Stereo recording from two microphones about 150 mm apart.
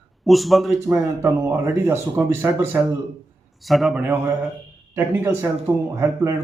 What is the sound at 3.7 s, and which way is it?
Speech, centre (ahead or behind).